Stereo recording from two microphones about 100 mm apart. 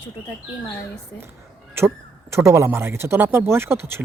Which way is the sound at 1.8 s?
25° right (ahead or behind).